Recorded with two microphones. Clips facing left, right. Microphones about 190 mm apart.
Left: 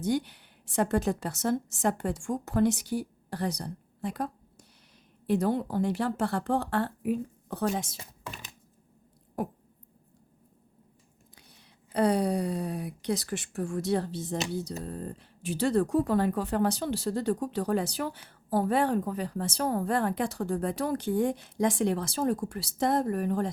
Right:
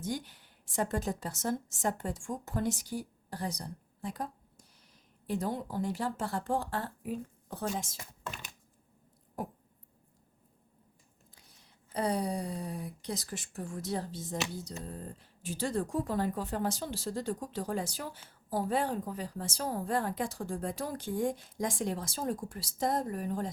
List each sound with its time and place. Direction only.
0.0 s speech: 70° left (ahead or behind)
11.9 s speech: 70° left (ahead or behind)